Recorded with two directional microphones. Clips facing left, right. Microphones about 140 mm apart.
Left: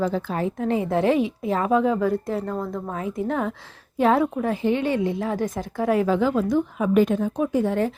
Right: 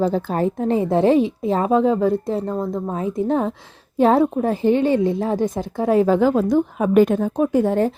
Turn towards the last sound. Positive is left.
turn(degrees=-40)  # may be behind; listen again after turning